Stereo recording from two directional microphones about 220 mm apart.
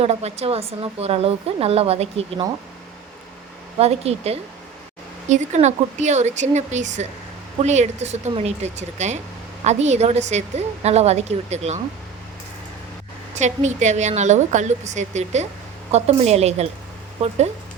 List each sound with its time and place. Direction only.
0.0 s speech: 30° right (ahead or behind)
3.8 s a woman's voice: 30° right (ahead or behind)
13.3 s a woman's voice: 30° right (ahead or behind)